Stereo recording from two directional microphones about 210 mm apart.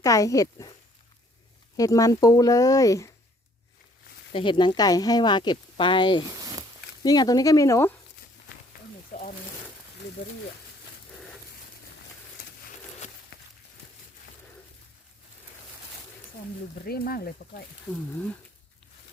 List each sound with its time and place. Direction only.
0.0 s speech: 15° left (ahead or behind)
1.7 s speech: 15° left (ahead or behind)
4.3 s speech: 25° left (ahead or behind)
6.4 s a sound: 15° right (ahead or behind)
7.0 s speech: 20° left (ahead or behind)
13.3 s a sound: 50° left (ahead or behind)
16.8 s speech: 45° left (ahead or behind)